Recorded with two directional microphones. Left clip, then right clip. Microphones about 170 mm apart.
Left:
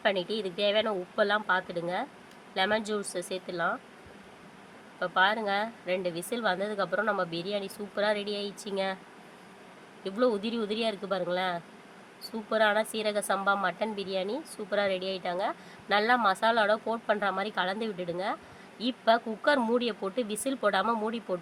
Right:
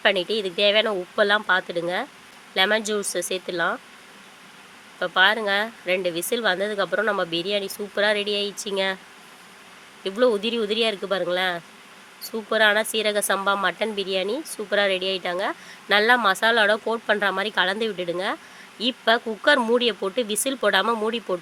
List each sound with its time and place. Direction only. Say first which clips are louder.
0.0 s speech: right 7 dB; 20° right (ahead or behind)
4.9 s speech: right 7 dB; 20° right (ahead or behind)
10.0 s speech: right 7 dB; 15° right (ahead or behind)